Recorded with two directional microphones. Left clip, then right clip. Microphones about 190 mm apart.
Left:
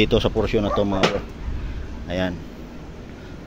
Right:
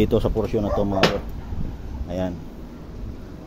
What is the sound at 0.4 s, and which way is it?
Speech, 5° right (ahead or behind).